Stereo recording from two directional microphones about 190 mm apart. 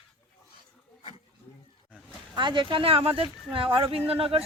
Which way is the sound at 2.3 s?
25° right (ahead or behind).